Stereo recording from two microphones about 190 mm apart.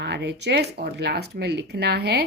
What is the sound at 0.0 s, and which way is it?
A woman's voice, 65° right (ahead or behind).